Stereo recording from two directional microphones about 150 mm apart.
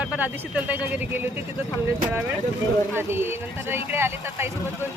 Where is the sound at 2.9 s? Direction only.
15° right (ahead or behind).